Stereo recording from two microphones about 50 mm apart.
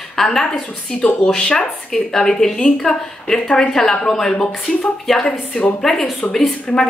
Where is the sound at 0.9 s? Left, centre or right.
Left.